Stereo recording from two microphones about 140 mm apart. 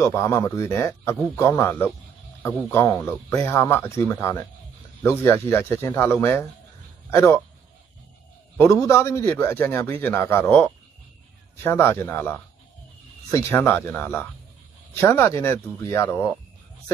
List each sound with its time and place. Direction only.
0.0 s speech: 20° left (ahead or behind)
8.8 s speech: 20° left (ahead or behind)